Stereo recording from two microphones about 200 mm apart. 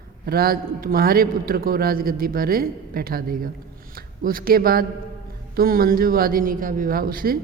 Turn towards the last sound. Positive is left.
turn(degrees=-45)  # may be behind; listen again after turning